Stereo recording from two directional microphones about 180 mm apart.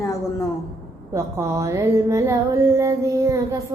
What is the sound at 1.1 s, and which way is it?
Music, 15° right (ahead or behind).